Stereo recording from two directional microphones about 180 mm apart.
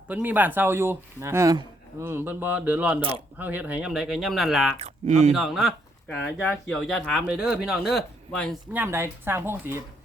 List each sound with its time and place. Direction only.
0.1 s speech: 10° right (ahead or behind)
4.8 s speech: 40° right (ahead or behind)
5.3 s speech: centre (ahead or behind)
6.2 s speech: 10° left (ahead or behind)
8.7 s speech: 10° right (ahead or behind)